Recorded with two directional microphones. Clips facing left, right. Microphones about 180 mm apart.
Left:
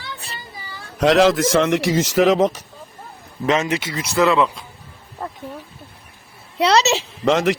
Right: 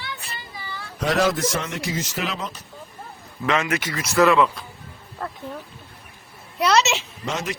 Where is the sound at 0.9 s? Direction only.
85° left.